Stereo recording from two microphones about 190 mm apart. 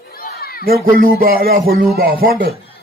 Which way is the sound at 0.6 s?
50° right (ahead or behind).